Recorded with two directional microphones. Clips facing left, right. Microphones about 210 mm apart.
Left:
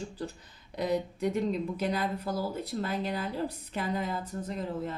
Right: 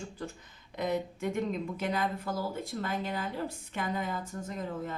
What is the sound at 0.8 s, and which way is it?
Speech, 35° left (ahead or behind).